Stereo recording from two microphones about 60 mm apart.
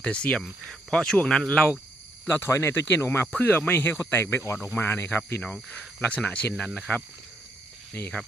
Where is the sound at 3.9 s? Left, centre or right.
Left.